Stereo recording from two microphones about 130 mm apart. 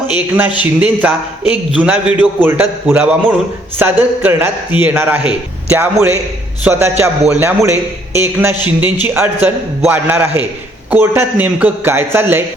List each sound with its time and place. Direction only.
0.1 s a man's voice: 15° right (ahead or behind)